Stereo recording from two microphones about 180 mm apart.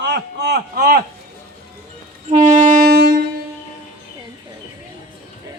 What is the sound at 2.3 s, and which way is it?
Saxophone, 40° right (ahead or behind).